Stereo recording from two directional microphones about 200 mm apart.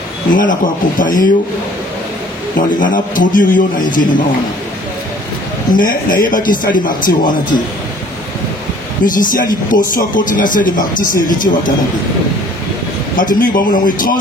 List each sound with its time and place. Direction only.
0.3 s a man's voice: 40° left (ahead or behind)
2.8 s speech: 40° left (ahead or behind)
5.7 s a man's voice: 45° left (ahead or behind)
9.0 s speech: 40° left (ahead or behind)
13.1 s speech: 40° left (ahead or behind)